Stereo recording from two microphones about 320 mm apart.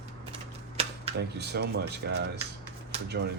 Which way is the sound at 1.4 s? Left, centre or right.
Right.